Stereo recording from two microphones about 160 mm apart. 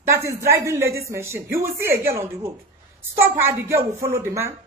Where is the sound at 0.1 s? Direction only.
20° right (ahead or behind).